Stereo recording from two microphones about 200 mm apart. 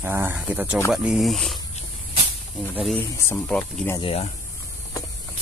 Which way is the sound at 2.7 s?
Centre (ahead or behind).